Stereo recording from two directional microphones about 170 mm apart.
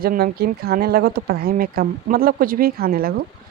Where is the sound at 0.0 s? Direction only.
60° right (ahead or behind).